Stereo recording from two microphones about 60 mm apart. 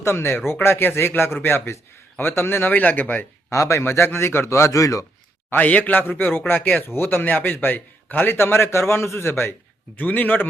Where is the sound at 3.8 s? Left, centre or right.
Left.